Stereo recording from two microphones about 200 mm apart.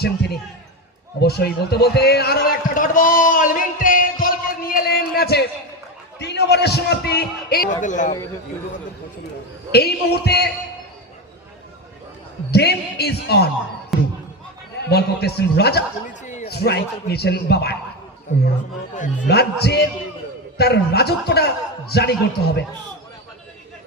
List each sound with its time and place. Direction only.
0.0 s a man's voice: 55° left (ahead or behind); by 8.1 s 40° left (ahead or behind)
9.7 s a man's voice: 55° left (ahead or behind)
12.5 s a man's voice: 55° left (ahead or behind)
13.9 s a sound: centre (ahead or behind)
14.8 s a man's voice: 55° left (ahead or behind)
16.2 s a sound: 35° left (ahead or behind)
16.5 s a man's voice: 55° left (ahead or behind)
18.3 s a man's voice: 40° left (ahead or behind)
19.3 s a man's voice: 55° left (ahead or behind)